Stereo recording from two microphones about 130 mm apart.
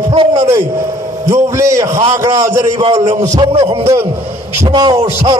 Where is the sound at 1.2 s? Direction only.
20° right (ahead or behind).